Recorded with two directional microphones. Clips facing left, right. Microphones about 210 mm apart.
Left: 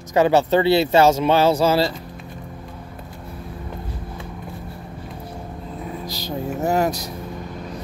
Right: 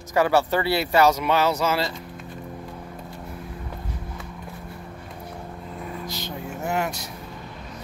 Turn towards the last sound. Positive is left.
turn(degrees=40)  # may be behind; listen again after turning